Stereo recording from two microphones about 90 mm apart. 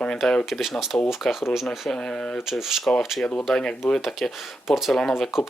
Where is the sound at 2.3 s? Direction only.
5° right (ahead or behind).